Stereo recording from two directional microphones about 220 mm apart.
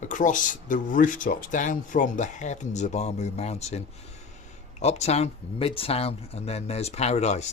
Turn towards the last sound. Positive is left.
turn(degrees=30)  # may be behind; listen again after turning